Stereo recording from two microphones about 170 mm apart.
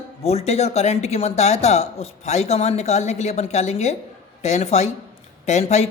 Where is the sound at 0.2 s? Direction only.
35° left (ahead or behind).